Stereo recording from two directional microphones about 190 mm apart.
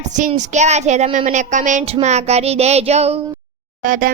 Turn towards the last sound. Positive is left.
turn(degrees=-45)  # may be behind; listen again after turning